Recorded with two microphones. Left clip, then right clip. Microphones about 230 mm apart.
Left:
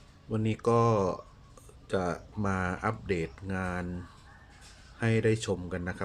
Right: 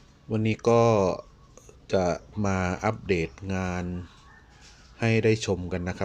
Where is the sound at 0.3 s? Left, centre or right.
Centre.